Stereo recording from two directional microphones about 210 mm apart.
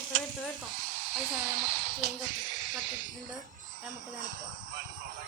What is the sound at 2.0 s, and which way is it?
Speech, 50° right (ahead or behind).